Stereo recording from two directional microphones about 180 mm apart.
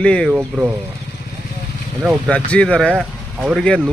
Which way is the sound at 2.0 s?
5° left (ahead or behind).